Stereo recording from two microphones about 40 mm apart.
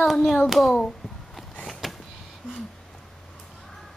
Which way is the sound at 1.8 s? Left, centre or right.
Centre.